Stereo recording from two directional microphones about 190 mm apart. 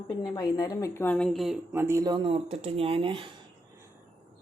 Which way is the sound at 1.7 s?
15° right (ahead or behind).